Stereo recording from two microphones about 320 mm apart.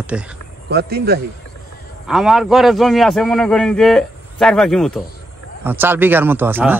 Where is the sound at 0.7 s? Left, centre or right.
Right.